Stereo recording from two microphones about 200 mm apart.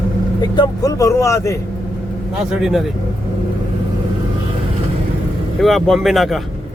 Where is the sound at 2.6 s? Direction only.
Centre (ahead or behind).